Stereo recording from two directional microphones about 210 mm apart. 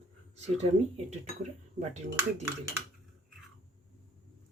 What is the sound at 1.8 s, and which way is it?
Speech, 35° right (ahead or behind).